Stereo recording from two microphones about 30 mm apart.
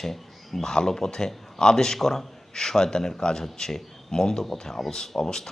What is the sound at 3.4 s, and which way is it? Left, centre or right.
Speech, centre.